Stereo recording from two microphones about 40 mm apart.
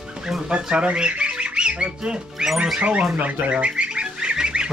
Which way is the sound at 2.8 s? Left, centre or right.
Right.